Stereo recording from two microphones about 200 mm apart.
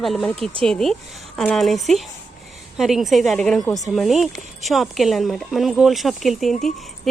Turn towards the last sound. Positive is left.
turn(degrees=0)  # may be behind; listen again after turning